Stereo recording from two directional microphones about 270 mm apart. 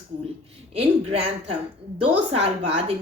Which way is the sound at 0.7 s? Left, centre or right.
Right.